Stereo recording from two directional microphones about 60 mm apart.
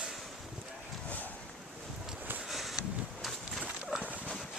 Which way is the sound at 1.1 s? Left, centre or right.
Left.